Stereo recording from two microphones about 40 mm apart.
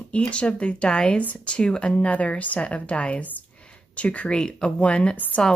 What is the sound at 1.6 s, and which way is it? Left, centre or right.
Speech, left.